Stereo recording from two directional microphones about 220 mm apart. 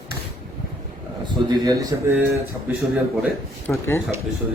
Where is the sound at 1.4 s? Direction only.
15° right (ahead or behind).